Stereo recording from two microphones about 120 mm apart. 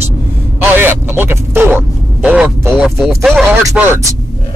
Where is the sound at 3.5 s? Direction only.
20° right (ahead or behind).